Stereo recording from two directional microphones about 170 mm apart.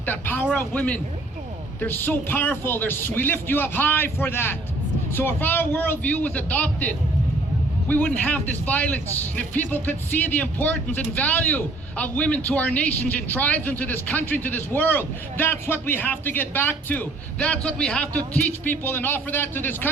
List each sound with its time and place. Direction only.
0.0 s a man's voice: 10° left (ahead or behind)